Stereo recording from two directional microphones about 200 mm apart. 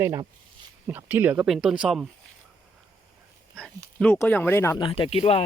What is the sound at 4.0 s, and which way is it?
Speech, 10° left (ahead or behind).